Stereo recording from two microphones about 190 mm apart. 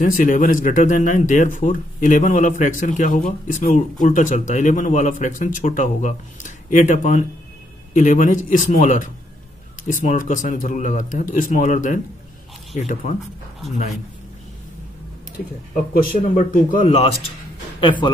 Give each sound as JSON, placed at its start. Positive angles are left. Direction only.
{"t": 0.0, "sound": "speech", "side_deg": 40}
{"t": 15.7, "sound": "speech", "side_deg": 45}